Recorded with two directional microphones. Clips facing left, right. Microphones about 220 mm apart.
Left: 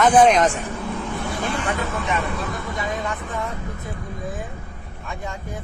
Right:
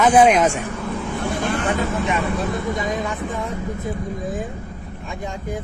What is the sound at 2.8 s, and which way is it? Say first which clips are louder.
Speech: right 3 dB; 15° right (ahead or behind).